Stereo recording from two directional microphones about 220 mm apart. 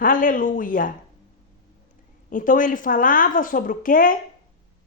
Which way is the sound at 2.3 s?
40° left (ahead or behind).